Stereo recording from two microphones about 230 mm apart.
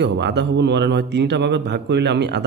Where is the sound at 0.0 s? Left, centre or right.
Right.